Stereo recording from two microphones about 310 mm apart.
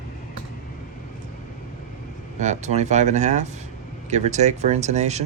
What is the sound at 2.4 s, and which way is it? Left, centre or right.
Speech, right.